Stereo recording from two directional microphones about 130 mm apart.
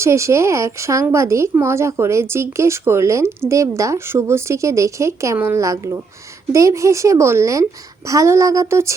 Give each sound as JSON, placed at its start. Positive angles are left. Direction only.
{"t": 0.0, "sound": "speech", "side_deg": -20}